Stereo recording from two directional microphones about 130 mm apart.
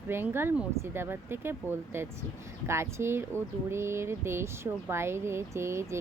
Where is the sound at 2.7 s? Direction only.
20° right (ahead or behind).